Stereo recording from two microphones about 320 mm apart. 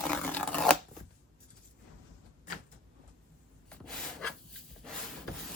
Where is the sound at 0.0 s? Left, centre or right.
Centre.